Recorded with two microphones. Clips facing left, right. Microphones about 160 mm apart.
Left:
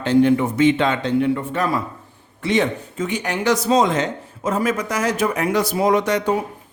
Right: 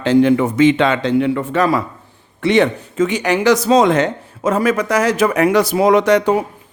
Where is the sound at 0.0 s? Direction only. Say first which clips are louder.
Right 3 dB; 90° right.